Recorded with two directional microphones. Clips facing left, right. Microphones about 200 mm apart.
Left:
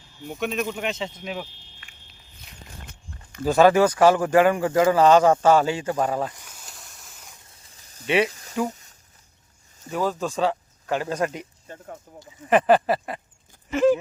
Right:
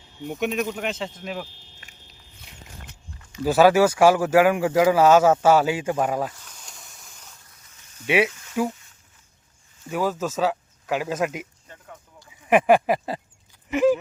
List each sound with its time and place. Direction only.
0.2 s speech: 20° right (ahead or behind)
0.5 s speech: centre (ahead or behind)
1.6 s a sound: 40° right (ahead or behind)
3.4 s speech: 5° right (ahead or behind)
6.3 s snake: 10° left (ahead or behind)
7.6 s snake: 35° left (ahead or behind)
8.0 s speech: 10° right (ahead or behind)
8.3 s a sound: 35° left (ahead or behind)
9.9 s speech: 10° right (ahead or behind)
12.5 s speech: 10° right (ahead or behind)
13.7 s a sound: 15° right (ahead or behind)